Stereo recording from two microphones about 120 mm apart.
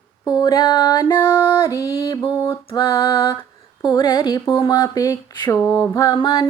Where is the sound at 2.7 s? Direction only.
40° left (ahead or behind).